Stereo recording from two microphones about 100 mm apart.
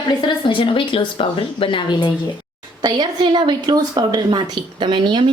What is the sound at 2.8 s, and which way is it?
A woman's voice, 45° right (ahead or behind).